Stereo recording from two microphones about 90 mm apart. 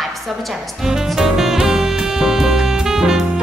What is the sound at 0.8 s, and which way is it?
Music, 5° right (ahead or behind).